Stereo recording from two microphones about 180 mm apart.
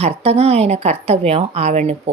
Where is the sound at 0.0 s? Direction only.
35° right (ahead or behind).